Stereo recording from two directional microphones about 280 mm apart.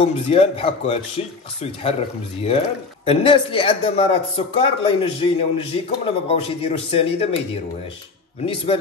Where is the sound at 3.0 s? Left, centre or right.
Centre.